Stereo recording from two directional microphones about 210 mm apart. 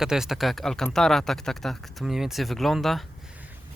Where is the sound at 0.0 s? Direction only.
Centre (ahead or behind).